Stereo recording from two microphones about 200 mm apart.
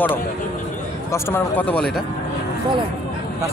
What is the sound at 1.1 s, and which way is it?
Speech, 10° left (ahead or behind).